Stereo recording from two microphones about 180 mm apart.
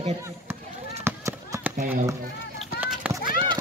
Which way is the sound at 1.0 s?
15° right (ahead or behind).